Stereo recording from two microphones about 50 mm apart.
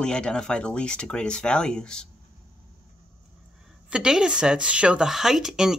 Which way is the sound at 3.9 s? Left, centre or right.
Centre.